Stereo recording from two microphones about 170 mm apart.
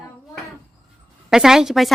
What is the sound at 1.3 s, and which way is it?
Speech, 5° right (ahead or behind).